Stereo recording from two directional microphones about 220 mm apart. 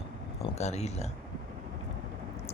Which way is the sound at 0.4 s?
30° left (ahead or behind).